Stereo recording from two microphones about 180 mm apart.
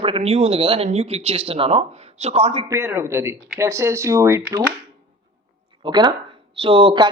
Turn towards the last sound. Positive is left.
turn(degrees=-25)  # may be behind; listen again after turning